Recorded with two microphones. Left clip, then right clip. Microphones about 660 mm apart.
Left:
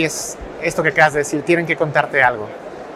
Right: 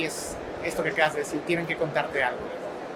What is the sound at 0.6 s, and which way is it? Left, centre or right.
Speech, left.